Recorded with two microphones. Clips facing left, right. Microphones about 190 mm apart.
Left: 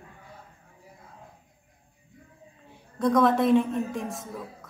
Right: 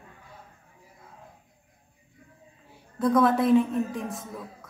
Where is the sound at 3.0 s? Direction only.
Centre (ahead or behind).